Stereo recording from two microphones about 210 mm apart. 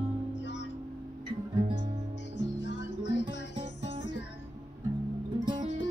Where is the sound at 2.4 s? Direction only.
55° left (ahead or behind).